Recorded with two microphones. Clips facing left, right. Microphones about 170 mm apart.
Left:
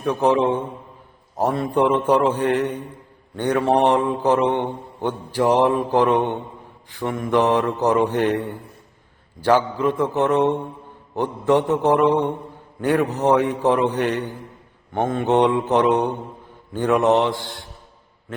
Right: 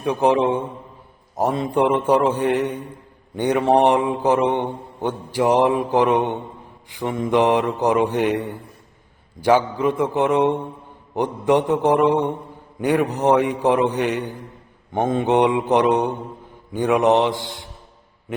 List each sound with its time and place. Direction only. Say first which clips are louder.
0.0 s mantra: even; 15° right (ahead or behind)